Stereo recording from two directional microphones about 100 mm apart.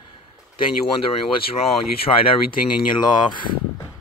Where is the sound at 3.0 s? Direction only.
50° left (ahead or behind).